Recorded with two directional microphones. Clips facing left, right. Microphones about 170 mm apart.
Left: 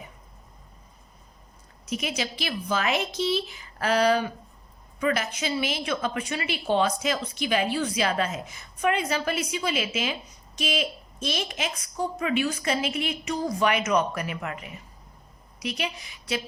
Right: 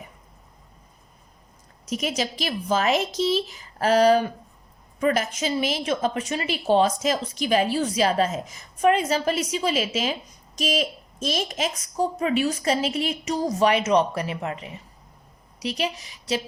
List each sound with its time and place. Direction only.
1.9 s a woman's voice: 40° right (ahead or behind)